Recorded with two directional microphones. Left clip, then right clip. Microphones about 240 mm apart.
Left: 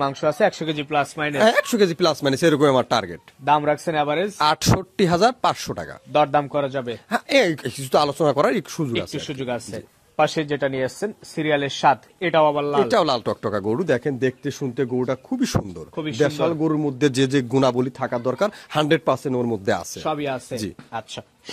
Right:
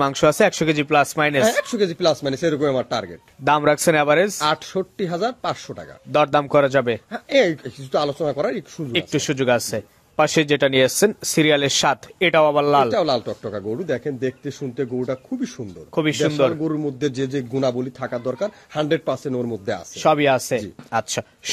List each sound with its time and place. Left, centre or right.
0.0 s speech: centre
1.4 s speech: left
3.4 s speech: right
4.4 s speech: left
6.1 s speech: right
7.1 s speech: left
8.9 s speech: right
12.9 s speech: left
15.9 s speech: right
16.3 s a man's voice: left
20.0 s speech: right